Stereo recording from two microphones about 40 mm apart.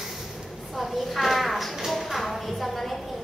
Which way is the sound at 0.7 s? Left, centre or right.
Centre.